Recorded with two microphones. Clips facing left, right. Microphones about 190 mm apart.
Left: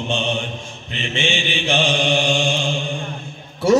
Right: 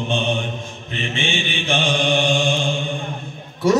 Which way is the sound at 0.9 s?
50° right (ahead or behind).